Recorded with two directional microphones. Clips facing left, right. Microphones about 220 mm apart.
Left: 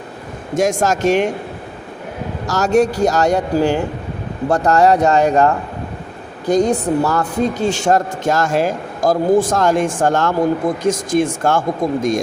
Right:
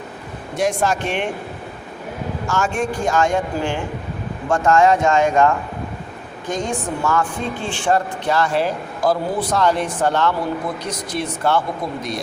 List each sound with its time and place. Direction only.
0.5 s speech: 45° left (ahead or behind)
2.5 s speech: 40° left (ahead or behind)